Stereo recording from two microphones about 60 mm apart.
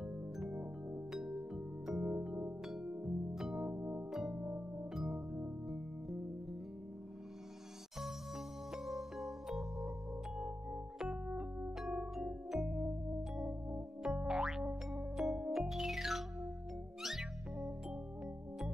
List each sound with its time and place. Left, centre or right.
0.0 s music: centre
3.7 s music: right
4.1 s music: centre
4.4 s music: right
4.9 s music: centre
8.7 s music: centre
11.2 s music: centre
11.8 s music: centre
13.4 s music: centre
14.0 s music: centre